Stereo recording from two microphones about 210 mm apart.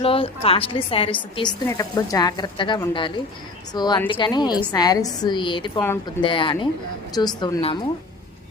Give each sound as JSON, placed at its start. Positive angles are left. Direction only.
{"t": 0.0, "sound": "a woman's voice", "side_deg": 25}
{"t": 1.6, "sound": "a woman's voice", "side_deg": 15}